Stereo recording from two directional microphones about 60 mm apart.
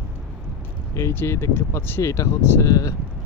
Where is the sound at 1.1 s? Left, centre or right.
Left.